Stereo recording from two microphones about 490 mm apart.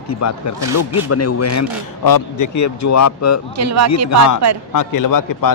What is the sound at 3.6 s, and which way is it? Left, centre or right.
Speech, right.